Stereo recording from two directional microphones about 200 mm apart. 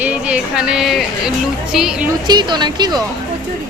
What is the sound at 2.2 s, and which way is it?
Speech, 20° right (ahead or behind).